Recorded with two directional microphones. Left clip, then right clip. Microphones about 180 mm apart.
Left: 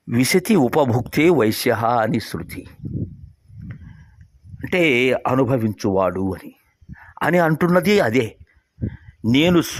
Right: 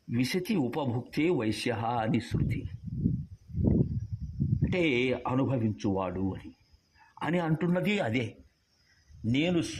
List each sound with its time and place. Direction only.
0.1 s speech: 45° left (ahead or behind)
4.6 s speech: 40° left (ahead or behind)